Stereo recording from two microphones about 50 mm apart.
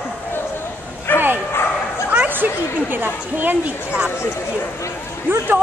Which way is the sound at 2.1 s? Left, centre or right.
Right.